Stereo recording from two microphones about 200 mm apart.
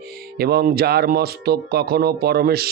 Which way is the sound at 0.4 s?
50° right (ahead or behind).